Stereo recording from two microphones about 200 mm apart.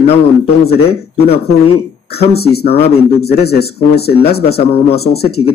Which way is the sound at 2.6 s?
30° left (ahead or behind).